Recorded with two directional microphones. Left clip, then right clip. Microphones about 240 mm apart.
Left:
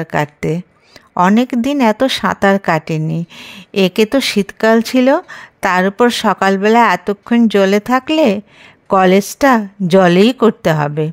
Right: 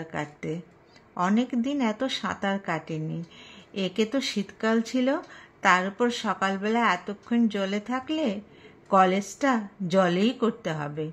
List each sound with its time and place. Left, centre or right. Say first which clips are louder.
0.0 s speech: left 16 dB; left